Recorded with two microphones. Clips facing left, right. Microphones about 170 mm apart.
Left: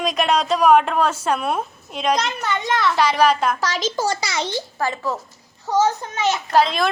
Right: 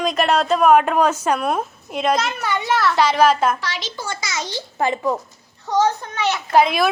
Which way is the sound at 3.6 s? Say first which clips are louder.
Left 7 dB; 45° left (ahead or behind).